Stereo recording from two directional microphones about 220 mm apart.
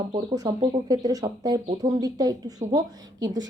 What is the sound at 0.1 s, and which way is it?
A woman's voice, 20° right (ahead or behind).